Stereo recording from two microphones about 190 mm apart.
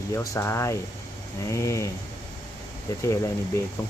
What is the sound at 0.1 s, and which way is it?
Speech, 15° left (ahead or behind).